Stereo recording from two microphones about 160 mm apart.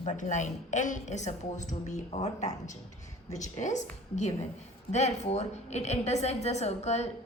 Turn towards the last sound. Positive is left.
turn(degrees=45)  # may be behind; listen again after turning